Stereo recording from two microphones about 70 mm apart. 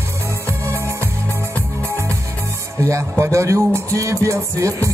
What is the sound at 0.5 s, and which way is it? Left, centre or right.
Music, right.